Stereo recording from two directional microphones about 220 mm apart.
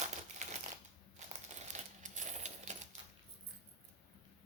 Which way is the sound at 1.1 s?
30° right (ahead or behind).